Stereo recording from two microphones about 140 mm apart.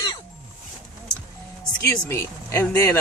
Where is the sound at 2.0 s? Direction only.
20° left (ahead or behind).